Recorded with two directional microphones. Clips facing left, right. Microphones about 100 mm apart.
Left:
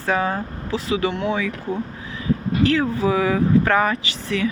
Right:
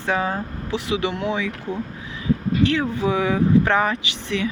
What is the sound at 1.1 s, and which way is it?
Speech, 30° left (ahead or behind).